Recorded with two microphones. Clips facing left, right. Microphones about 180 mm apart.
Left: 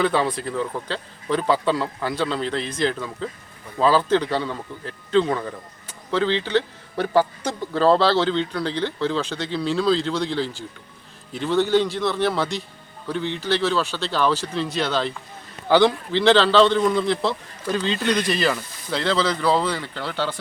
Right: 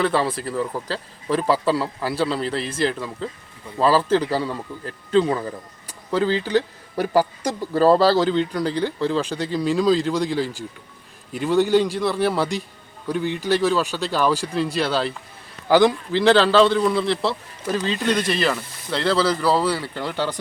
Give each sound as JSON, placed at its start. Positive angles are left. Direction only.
{"t": 0.0, "sound": "a man's voice", "side_deg": 0}